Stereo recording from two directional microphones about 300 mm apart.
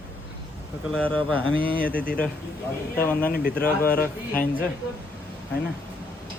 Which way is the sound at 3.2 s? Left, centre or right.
Left.